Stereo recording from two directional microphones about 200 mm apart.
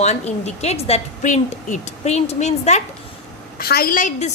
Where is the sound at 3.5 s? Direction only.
50° left (ahead or behind).